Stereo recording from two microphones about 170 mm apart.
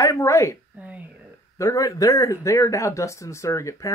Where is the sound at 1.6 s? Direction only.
20° left (ahead or behind).